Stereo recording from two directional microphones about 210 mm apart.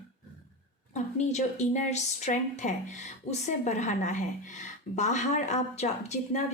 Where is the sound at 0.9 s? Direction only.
35° left (ahead or behind).